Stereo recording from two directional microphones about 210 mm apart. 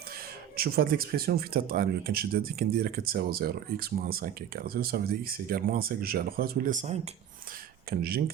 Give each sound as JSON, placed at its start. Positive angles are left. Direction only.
{"t": 0.5, "sound": "speech", "side_deg": -45}
{"t": 7.9, "sound": "speech", "side_deg": -45}